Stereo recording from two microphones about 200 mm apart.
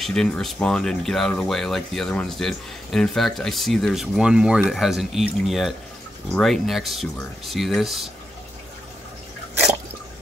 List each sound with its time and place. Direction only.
0.0 s speech: centre (ahead or behind)